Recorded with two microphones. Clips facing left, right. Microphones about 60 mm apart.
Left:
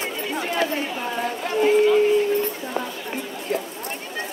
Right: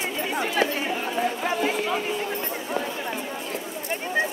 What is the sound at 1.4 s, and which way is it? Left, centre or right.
Speech, centre.